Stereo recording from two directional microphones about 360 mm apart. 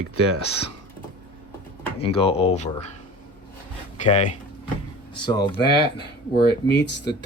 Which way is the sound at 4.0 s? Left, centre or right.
Centre.